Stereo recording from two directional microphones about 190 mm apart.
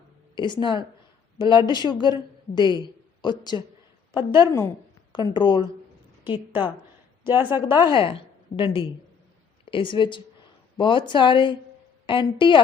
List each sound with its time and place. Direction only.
0.3 s a woman's voice: 25° left (ahead or behind)
7.3 s a woman's voice: 10° right (ahead or behind)
7.8 s a woman's voice: 25° left (ahead or behind)